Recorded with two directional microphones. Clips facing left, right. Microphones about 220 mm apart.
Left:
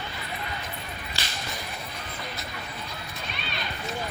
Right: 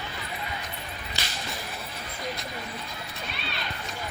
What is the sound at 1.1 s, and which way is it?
Whip, 20° right (ahead or behind).